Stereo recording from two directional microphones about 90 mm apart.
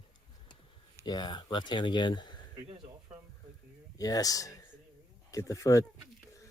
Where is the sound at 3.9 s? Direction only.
45° left (ahead or behind).